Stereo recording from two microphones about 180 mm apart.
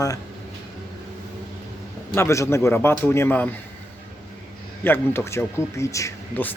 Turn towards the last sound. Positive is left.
turn(degrees=15)  # may be behind; listen again after turning